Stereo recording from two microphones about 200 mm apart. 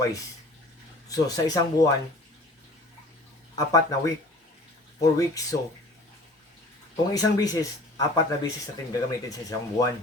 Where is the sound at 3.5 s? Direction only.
15° left (ahead or behind).